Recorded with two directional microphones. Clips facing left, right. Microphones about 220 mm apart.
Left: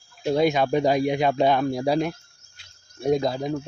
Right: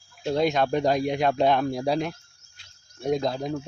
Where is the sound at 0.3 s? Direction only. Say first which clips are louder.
Left 2 dB; 5° left (ahead or behind).